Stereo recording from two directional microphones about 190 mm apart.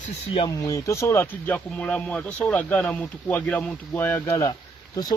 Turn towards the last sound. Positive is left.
turn(degrees=20)  # may be behind; listen again after turning